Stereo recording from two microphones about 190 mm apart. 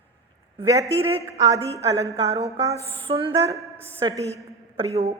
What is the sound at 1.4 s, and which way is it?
A woman's voice, 15° right (ahead or behind).